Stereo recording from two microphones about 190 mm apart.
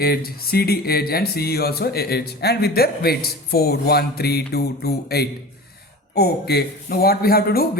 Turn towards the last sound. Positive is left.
turn(degrees=55)  # may be behind; listen again after turning